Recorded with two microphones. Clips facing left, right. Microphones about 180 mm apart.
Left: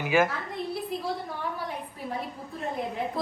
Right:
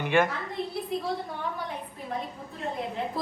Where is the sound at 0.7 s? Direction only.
Centre (ahead or behind).